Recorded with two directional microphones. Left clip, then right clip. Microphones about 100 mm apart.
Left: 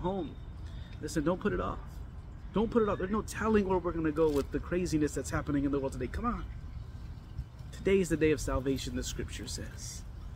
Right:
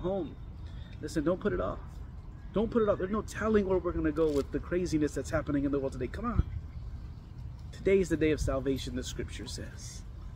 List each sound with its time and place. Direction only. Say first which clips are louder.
0.0 s a sound: right 2 dB; 15° left (ahead or behind)
1.0 s speech: right 1 dB; 20° left (ahead or behind)
7.8 s speech: right 1 dB; 15° left (ahead or behind)